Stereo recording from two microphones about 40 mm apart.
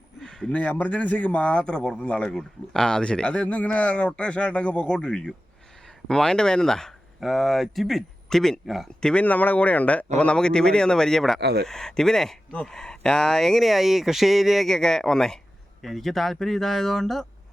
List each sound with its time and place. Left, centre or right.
0.2 s a sound: centre
0.5 s speech: left; by 6.9 s centre
7.2 s speech: centre
9.2 s speech: left
10.3 s speech: centre
14.7 s speech: centre